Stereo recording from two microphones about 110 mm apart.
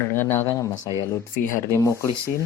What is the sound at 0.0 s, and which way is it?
Speech, 20° left (ahead or behind).